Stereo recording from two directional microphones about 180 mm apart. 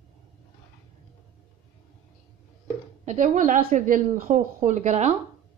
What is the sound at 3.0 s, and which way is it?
Speech, 45° right (ahead or behind).